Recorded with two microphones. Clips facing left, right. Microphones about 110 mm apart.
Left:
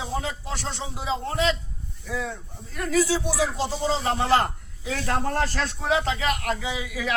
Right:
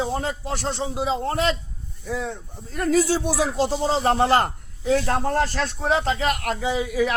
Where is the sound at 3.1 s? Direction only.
55° right (ahead or behind).